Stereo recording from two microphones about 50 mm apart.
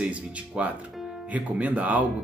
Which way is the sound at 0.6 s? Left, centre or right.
Right.